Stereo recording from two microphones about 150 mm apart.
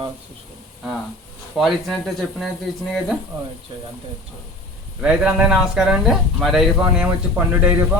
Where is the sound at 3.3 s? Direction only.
35° right (ahead or behind).